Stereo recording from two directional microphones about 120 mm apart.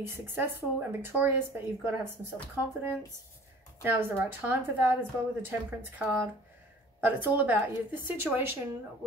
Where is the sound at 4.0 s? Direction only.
15° right (ahead or behind).